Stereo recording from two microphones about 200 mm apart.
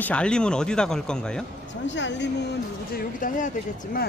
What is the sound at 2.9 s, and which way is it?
Speech, 40° left (ahead or behind).